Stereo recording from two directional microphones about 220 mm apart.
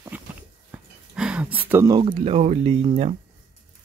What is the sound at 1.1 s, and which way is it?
Speech, 5° right (ahead or behind).